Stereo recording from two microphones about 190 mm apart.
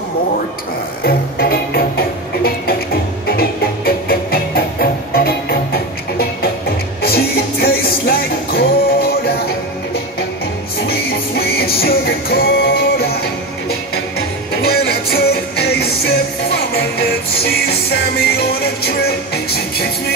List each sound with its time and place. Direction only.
1.0 s music: 55° left (ahead or behind)
10.9 s music: 55° left (ahead or behind)